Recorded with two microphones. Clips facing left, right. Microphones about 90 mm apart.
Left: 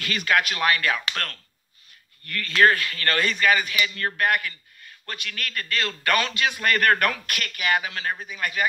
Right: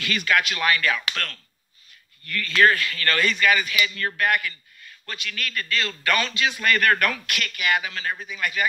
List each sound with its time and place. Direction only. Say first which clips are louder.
0.0 s a man's voice: even; 45° left (ahead or behind)
2.2 s a man's voice: even; 50° left (ahead or behind)